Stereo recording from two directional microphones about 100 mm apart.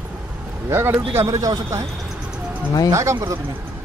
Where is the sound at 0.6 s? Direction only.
25° right (ahead or behind).